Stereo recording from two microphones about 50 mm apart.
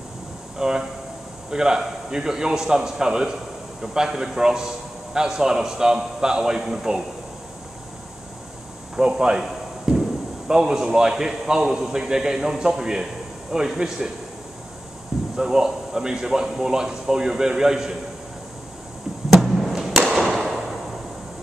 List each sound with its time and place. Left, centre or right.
0.6 s a man's voice: centre
8.9 s a man's voice: centre
9.4 s a sound: centre
10.5 s a man's voice: centre
15.3 s a man's voice: centre
19.4 s a sound: centre